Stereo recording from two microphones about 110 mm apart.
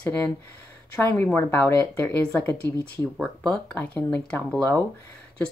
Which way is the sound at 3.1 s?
5° left (ahead or behind).